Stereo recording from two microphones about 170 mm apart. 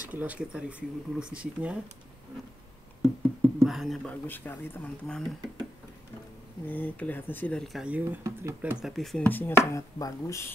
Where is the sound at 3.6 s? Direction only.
Centre (ahead or behind).